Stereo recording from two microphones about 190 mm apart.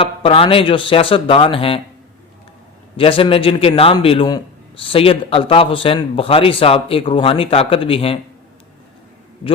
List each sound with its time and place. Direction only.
0.0 s a man's voice: 30° left (ahead or behind)
3.0 s a man's voice: 30° left (ahead or behind)